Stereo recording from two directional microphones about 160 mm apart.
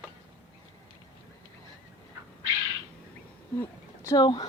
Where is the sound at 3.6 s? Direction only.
20° left (ahead or behind).